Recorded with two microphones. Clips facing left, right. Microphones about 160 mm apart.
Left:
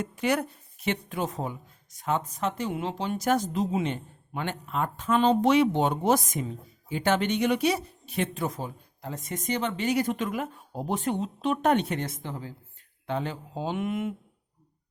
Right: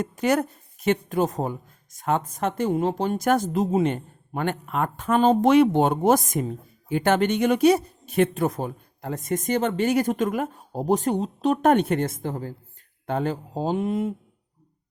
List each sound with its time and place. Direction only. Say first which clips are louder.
0.0 s speech: right 4 dB; 45° right (ahead or behind)